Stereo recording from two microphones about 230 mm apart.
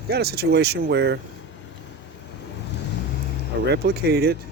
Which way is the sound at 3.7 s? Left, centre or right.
Right.